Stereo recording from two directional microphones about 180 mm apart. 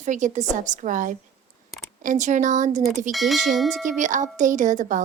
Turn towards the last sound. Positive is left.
turn(degrees=-45)  # may be behind; listen again after turning